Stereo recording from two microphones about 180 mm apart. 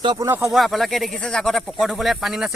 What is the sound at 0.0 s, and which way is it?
Speech, 25° right (ahead or behind).